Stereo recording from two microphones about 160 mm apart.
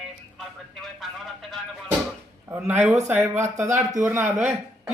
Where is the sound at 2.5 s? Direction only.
15° right (ahead or behind).